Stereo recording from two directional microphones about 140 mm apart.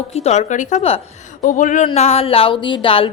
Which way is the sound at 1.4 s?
65° left (ahead or behind).